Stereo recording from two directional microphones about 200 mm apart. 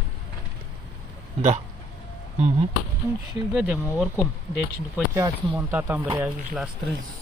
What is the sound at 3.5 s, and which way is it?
Speech, 5° right (ahead or behind).